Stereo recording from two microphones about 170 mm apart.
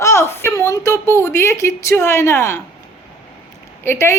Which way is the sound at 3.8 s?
15° left (ahead or behind).